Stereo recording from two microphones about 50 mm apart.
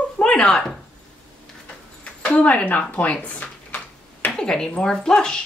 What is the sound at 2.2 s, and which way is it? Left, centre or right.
Speech, left.